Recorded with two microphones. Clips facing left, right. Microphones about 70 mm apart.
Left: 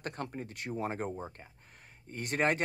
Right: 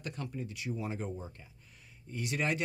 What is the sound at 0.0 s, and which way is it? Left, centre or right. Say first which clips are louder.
Speech: left 1 dB; left.